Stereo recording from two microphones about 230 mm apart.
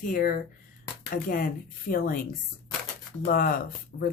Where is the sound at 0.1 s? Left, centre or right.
Left.